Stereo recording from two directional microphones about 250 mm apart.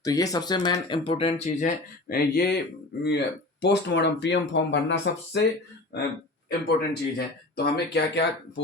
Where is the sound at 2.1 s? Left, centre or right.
Left.